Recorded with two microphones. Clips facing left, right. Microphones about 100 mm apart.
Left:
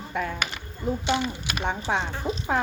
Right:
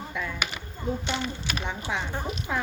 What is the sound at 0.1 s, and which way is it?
Speech, 45° left (ahead or behind).